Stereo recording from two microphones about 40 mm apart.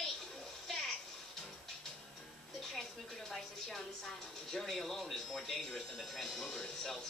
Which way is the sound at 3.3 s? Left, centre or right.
Centre.